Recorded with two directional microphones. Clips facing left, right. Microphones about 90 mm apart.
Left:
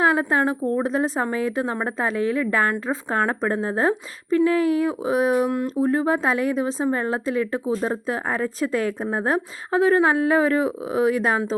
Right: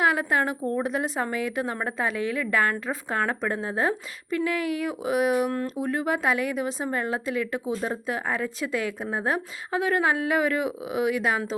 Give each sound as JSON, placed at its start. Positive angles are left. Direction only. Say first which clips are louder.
{"t": 0.0, "sound": "a woman's voice", "louder": "left 4 dB", "side_deg": 30}